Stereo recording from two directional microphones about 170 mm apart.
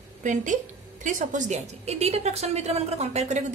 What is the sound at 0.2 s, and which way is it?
A woman's voice, 45° right (ahead or behind).